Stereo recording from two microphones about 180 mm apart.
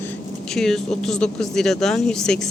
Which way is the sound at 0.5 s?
Centre (ahead or behind).